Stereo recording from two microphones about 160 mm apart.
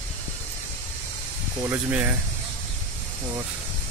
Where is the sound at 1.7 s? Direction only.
10° right (ahead or behind).